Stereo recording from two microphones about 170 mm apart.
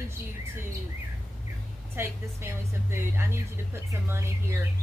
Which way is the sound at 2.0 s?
15° right (ahead or behind).